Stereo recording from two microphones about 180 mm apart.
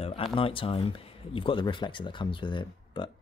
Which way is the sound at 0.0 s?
30° left (ahead or behind).